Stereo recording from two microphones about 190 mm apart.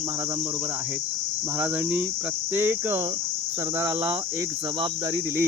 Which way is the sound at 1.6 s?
10° right (ahead or behind).